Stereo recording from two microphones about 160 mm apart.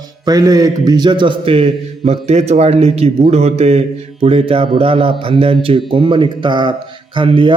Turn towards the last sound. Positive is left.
turn(degrees=-30)  # may be behind; listen again after turning